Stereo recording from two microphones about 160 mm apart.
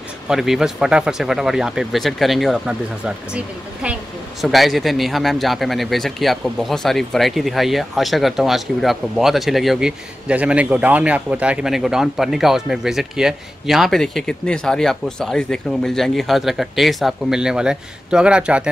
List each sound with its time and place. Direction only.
0.3 s speech: 5° right (ahead or behind)